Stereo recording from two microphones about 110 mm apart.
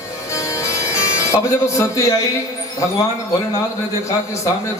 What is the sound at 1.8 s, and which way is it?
Speech, 25° left (ahead or behind).